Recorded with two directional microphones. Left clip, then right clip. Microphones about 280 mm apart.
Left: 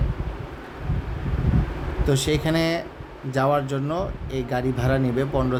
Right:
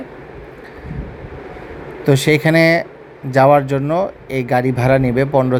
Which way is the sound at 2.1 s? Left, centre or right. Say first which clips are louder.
Right 10 dB; centre.